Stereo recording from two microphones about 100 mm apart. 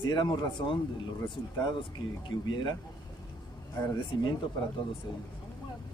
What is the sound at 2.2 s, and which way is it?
Speech, 50° left (ahead or behind).